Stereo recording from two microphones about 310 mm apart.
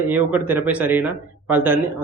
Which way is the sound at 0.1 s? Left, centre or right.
Centre.